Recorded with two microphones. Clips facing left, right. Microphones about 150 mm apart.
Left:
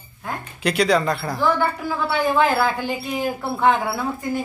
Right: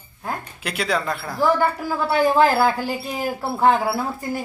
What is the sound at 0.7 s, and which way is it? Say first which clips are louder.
Speech: left 5 dB; 5° right (ahead or behind).